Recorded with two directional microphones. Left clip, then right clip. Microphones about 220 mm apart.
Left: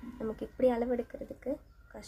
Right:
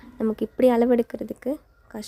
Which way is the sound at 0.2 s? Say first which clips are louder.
Right 9 dB; 50° right (ahead or behind).